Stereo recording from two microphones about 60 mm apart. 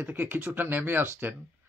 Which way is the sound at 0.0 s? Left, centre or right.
Right.